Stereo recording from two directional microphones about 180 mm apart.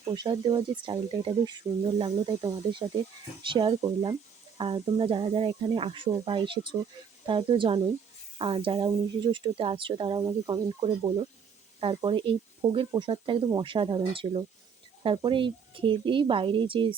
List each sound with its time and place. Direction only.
0.0 s speech: 25° right (ahead or behind)